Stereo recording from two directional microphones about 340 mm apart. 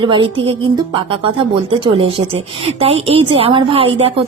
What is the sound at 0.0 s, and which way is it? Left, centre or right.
A woman's voice, centre.